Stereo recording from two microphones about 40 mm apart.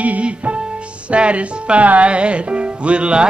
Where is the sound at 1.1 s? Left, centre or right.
Right.